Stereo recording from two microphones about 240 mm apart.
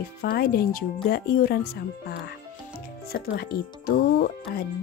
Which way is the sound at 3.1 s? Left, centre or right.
Left.